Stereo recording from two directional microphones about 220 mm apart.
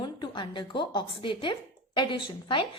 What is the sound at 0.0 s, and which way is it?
A woman's voice, 20° left (ahead or behind).